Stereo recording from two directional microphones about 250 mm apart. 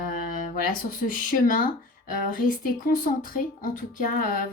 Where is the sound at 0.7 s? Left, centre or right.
Left.